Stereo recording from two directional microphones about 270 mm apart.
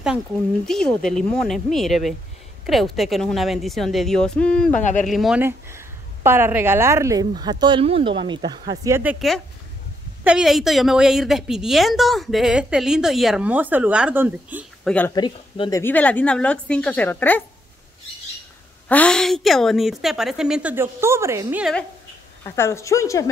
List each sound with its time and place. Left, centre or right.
0.7 s a woman's voice: centre
4.7 s speech: left
5.0 s a woman's voice: centre
15.0 s speech: centre
15.8 s a woman's voice: centre
18.9 s a woman's voice: centre
22.6 s speech: centre